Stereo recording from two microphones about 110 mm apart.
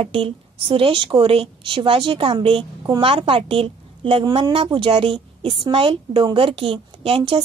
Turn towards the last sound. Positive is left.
turn(degrees=-50)  # may be behind; listen again after turning